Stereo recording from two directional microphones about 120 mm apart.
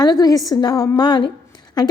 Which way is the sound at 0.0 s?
35° left (ahead or behind).